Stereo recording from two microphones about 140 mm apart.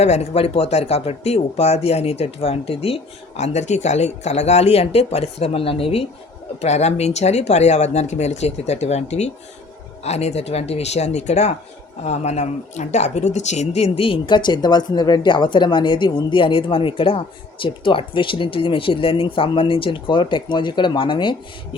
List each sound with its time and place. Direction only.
0.0 s speech: 50° left (ahead or behind); by 21.8 s 35° left (ahead or behind)